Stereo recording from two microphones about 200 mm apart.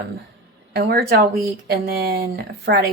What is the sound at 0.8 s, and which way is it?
A woman's voice, 55° right (ahead or behind).